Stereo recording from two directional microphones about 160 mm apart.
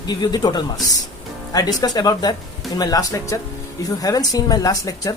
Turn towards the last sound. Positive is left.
turn(degrees=25)  # may be behind; listen again after turning